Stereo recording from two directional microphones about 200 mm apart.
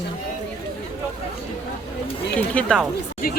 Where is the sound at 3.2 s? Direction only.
45° left (ahead or behind).